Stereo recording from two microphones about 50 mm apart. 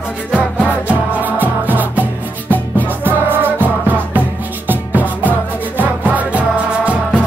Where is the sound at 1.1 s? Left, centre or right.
Right.